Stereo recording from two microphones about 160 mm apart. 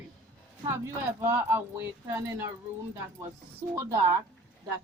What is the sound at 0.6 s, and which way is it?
Speech, 15° right (ahead or behind).